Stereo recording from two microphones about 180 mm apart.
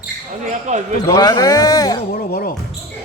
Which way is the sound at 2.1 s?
60° left (ahead or behind).